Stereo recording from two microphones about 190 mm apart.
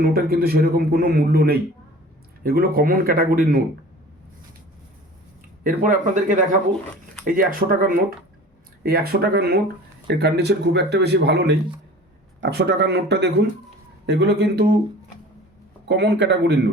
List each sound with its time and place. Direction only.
0.0 s a man's voice: 50° right (ahead or behind)
5.6 s a man's voice: 45° right (ahead or behind); by 14.7 s 65° right (ahead or behind)
15.9 s speech: 65° right (ahead or behind)